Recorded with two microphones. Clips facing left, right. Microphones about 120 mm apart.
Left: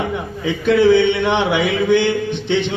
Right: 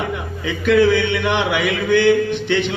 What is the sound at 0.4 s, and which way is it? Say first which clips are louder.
Speech: left 1 dB; 30° left (ahead or behind).